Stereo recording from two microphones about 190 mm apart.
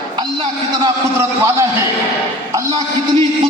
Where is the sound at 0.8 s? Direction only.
15° right (ahead or behind).